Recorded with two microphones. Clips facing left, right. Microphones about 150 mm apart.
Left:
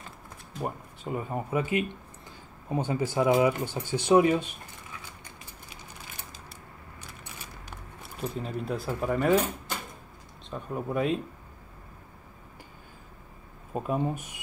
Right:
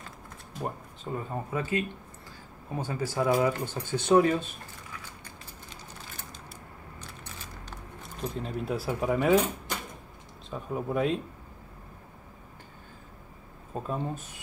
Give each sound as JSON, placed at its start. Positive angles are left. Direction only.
{"t": 1.0, "sound": "speech", "side_deg": 15}
{"t": 8.0, "sound": "speech", "side_deg": 5}
{"t": 10.5, "sound": "speech", "side_deg": 0}
{"t": 13.7, "sound": "speech", "side_deg": 15}